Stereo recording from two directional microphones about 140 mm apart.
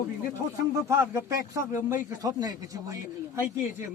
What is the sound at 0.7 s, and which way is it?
A man's voice, 20° right (ahead or behind).